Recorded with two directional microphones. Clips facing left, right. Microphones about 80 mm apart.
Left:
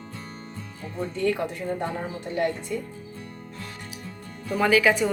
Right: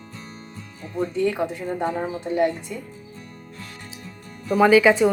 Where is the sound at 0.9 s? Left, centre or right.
Centre.